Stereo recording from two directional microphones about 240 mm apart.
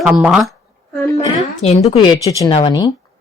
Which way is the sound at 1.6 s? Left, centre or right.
Left.